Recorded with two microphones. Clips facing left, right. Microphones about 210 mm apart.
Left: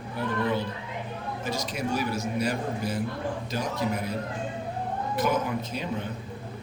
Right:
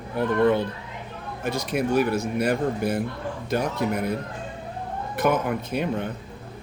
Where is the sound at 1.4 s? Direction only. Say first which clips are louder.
Right 6 dB; 60° right (ahead or behind).